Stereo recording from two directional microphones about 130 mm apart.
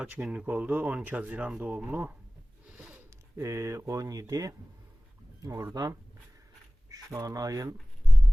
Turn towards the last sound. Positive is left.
turn(degrees=-25)  # may be behind; listen again after turning